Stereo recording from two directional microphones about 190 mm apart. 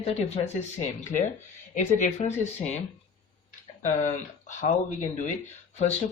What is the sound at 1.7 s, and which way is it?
Speech, 45° left (ahead or behind).